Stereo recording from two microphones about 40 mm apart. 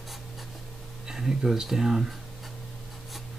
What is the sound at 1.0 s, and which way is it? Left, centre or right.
Speech, centre.